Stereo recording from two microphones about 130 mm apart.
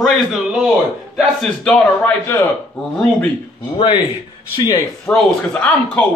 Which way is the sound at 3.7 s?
40° left (ahead or behind).